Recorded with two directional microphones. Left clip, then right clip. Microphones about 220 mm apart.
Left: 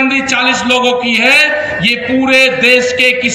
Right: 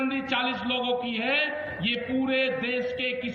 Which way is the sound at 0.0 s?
45° left (ahead or behind).